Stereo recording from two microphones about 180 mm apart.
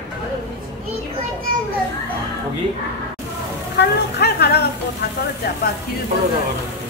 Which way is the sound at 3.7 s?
65° left (ahead or behind).